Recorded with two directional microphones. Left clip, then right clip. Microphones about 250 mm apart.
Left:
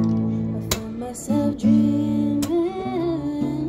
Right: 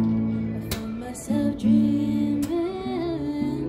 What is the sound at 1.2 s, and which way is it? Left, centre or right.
Music, left.